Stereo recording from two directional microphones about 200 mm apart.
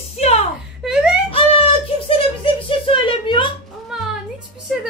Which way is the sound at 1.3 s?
30° left (ahead or behind).